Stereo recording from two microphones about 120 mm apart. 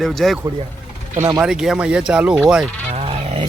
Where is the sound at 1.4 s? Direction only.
5° right (ahead or behind).